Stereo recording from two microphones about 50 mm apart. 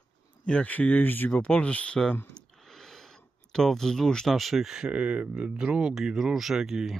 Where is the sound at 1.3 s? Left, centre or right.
Left.